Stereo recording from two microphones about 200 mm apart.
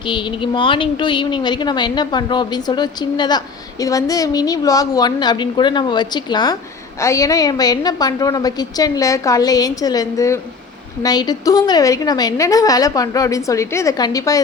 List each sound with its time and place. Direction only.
0.1 s a woman's voice: 25° left (ahead or behind)